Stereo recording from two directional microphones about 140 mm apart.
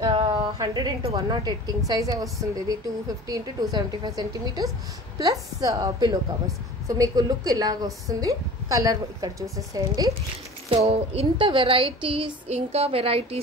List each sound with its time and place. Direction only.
0.0 s a sound: 35° right (ahead or behind)
1.1 s a woman's voice: 30° right (ahead or behind)
10.7 s child singing: 45° right (ahead or behind)